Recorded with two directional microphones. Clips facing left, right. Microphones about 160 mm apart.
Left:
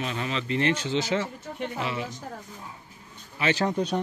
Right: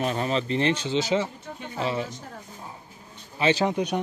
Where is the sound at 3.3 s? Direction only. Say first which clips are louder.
Right 2 dB; 25° right (ahead or behind).